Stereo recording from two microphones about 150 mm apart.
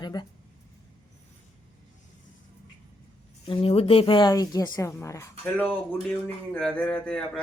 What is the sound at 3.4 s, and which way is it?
A woman's voice, 40° left (ahead or behind).